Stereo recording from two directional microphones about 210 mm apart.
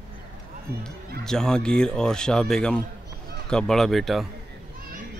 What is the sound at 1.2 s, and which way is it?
Speech, 5° left (ahead or behind).